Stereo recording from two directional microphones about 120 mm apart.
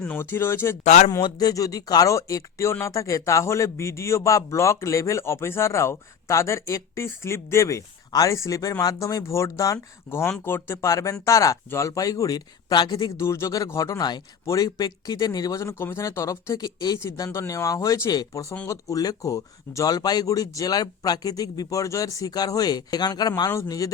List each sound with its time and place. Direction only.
0.0 s speech: 15° left (ahead or behind)
0.9 s speech: 80° left
1.1 s speech: 30° left (ahead or behind)
13.1 s speech: 25° left (ahead or behind)